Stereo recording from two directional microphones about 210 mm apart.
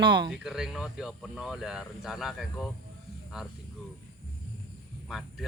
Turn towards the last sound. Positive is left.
turn(degrees=0)  # may be behind; listen again after turning